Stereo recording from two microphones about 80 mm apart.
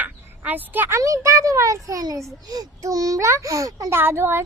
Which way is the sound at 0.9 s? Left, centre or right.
Right.